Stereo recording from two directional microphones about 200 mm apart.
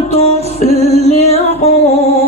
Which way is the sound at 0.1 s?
30° left (ahead or behind).